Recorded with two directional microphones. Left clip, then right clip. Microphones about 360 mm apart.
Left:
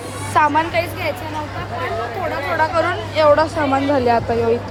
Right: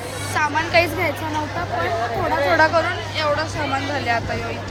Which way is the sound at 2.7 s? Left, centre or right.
Centre.